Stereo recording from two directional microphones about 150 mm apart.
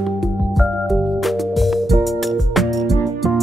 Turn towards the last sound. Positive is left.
turn(degrees=0)  # may be behind; listen again after turning